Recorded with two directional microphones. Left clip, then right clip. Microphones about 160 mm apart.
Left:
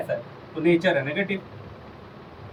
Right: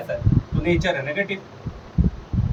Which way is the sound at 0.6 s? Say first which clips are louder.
Left 2 dB; 20° right (ahead or behind).